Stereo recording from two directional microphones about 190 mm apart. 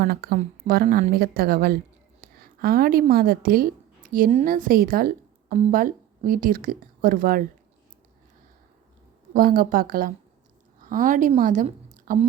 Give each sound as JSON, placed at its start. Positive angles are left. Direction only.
{"t": 0.0, "sound": "a woman's voice", "side_deg": -50}
{"t": 9.3, "sound": "a woman's voice", "side_deg": -50}